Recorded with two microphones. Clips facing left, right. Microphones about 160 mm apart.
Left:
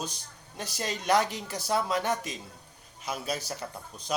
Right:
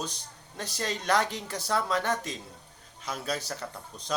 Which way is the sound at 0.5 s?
15° left (ahead or behind).